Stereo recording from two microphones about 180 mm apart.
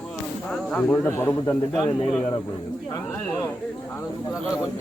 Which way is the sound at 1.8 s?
25° left (ahead or behind).